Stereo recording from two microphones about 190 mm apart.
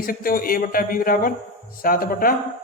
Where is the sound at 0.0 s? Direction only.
50° left (ahead or behind).